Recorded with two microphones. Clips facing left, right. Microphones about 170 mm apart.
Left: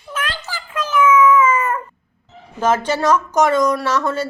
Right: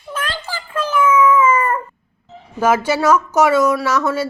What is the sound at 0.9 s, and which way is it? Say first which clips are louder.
Cat: left 1 dB; 10° right (ahead or behind).